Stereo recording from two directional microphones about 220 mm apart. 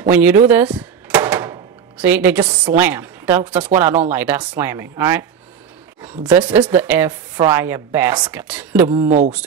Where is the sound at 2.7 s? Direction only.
10° right (ahead or behind).